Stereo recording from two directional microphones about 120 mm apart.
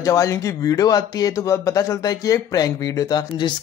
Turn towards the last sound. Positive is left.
turn(degrees=35)  # may be behind; listen again after turning